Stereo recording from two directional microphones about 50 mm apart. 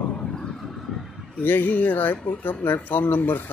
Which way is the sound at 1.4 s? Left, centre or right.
Left.